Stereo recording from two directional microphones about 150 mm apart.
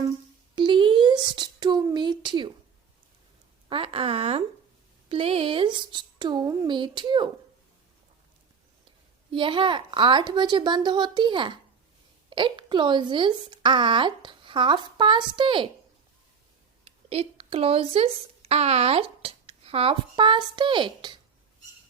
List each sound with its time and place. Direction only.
0.5 s a sound: 30° right (ahead or behind)
3.7 s a woman's voice: 40° right (ahead or behind); by 6.7 s 20° right (ahead or behind)
6.7 s a woman's voice: 30° right (ahead or behind)
9.3 s a woman's voice: 35° right (ahead or behind)
16.8 s speech: 40° right (ahead or behind)